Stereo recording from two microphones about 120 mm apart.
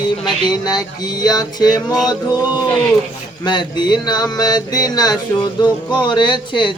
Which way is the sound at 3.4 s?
40° left (ahead or behind).